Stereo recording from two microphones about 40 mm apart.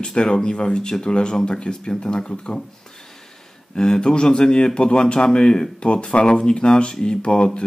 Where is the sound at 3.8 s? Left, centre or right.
Centre.